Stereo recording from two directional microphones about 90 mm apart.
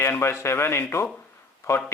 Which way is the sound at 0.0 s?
30° left (ahead or behind).